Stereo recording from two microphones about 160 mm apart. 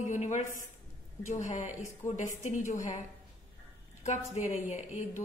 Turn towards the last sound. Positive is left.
turn(degrees=50)  # may be behind; listen again after turning